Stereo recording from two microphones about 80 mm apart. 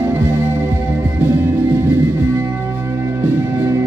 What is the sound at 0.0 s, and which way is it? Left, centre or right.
Music, right.